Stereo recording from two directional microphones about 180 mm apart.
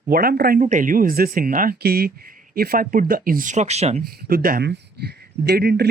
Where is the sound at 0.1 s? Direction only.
55° right (ahead or behind); by 4.0 s 35° right (ahead or behind).